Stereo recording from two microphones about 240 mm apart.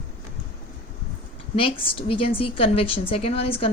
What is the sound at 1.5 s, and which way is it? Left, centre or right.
Speech, left.